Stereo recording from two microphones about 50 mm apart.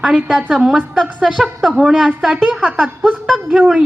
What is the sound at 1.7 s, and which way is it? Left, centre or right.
Speech, centre.